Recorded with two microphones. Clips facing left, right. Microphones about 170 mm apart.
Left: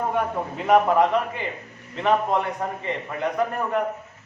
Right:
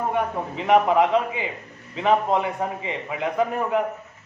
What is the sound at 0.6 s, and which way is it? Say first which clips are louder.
A man's voice: even; centre (ahead or behind).